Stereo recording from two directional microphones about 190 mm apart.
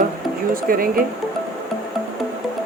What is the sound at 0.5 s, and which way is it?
Speech, 50° right (ahead or behind).